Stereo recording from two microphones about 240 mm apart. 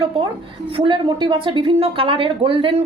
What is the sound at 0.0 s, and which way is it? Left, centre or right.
A woman's voice, right.